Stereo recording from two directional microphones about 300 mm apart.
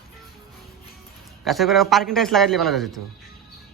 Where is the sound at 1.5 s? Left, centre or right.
Centre.